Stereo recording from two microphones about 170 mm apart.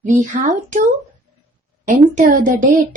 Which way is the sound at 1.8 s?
50° right (ahead or behind).